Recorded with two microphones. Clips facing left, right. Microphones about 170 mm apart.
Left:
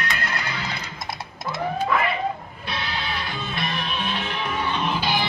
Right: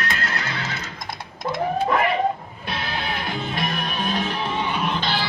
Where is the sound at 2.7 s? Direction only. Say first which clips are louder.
Right 2 dB; 50° right (ahead or behind).